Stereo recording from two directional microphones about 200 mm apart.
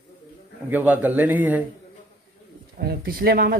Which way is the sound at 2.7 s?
50° right (ahead or behind).